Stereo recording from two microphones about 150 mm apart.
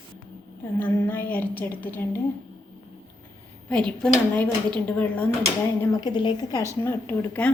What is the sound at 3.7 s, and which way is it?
A woman's voice, 5° left (ahead or behind).